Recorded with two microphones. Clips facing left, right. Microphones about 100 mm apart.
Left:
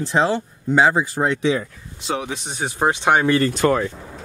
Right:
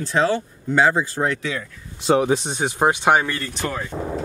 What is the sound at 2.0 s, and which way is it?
Speech, 40° right (ahead or behind).